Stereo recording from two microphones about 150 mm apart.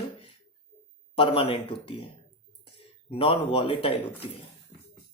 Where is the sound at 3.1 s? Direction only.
35° left (ahead or behind).